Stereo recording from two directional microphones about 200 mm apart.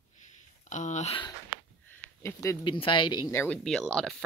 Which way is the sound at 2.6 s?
25° left (ahead or behind).